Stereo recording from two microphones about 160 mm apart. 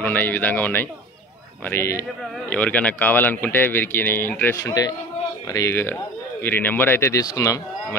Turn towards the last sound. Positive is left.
turn(degrees=20)  # may be behind; listen again after turning